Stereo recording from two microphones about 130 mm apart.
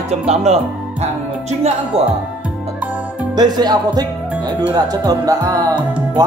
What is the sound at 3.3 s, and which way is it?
Speech, 30° right (ahead or behind).